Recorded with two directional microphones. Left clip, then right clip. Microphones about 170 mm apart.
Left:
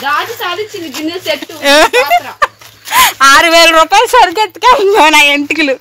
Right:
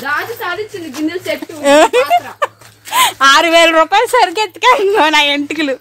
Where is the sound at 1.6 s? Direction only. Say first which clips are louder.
Left 1 dB; 20° right (ahead or behind).